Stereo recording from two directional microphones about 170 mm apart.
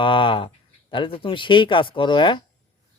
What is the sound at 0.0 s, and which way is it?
Speech, 30° left (ahead or behind).